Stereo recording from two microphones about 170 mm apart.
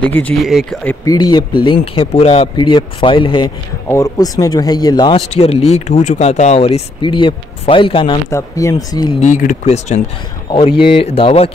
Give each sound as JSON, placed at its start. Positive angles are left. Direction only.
{"t": 0.0, "sound": "speech", "side_deg": 10}
{"t": 0.8, "sound": "speech", "side_deg": 20}
{"t": 3.9, "sound": "speech", "side_deg": 20}
{"t": 5.4, "sound": "speech", "side_deg": 35}
{"t": 8.3, "sound": "speech", "side_deg": 15}
{"t": 9.2, "sound": "speech", "side_deg": 50}